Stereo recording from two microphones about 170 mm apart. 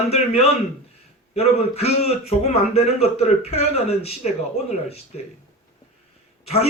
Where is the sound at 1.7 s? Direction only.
35° left (ahead or behind).